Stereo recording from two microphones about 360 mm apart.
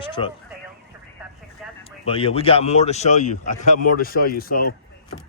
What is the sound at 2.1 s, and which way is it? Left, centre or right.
A man's voice, centre.